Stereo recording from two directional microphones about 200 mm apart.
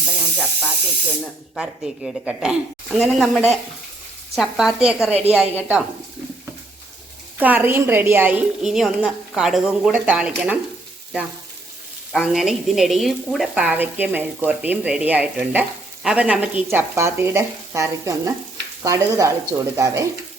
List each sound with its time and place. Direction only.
0.3 s a woman's voice: 5° left (ahead or behind)
7.3 s a woman's voice: 10° right (ahead or behind)
12.1 s a woman's voice: centre (ahead or behind)